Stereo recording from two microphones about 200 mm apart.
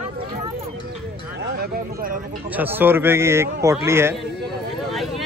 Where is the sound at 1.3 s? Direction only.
55° right (ahead or behind).